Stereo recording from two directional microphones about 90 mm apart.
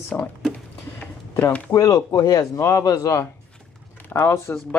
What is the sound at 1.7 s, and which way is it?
Speech, 40° left (ahead or behind).